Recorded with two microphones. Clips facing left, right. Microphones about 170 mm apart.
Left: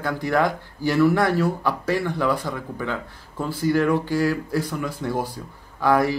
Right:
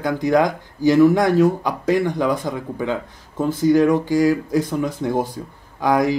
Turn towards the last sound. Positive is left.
turn(degrees=-15)  # may be behind; listen again after turning